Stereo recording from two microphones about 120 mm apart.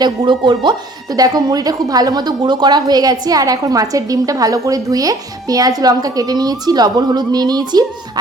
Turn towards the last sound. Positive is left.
turn(degrees=-35)  # may be behind; listen again after turning